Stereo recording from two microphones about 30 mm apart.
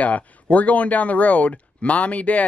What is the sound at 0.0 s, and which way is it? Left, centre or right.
Speech, left.